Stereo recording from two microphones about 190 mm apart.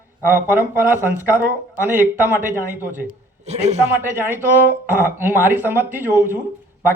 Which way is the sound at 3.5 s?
35° right (ahead or behind).